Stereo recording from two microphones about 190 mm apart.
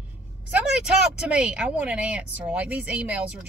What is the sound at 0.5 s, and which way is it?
Speech, 5° right (ahead or behind).